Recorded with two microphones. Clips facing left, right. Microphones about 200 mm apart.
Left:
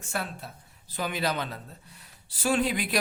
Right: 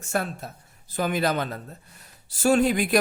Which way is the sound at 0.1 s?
45° right (ahead or behind).